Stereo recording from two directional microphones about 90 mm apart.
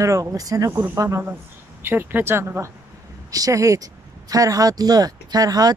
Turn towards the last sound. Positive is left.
turn(degrees=-45)  # may be behind; listen again after turning